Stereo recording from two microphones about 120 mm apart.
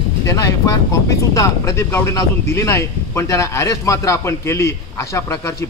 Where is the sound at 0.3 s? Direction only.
25° left (ahead or behind).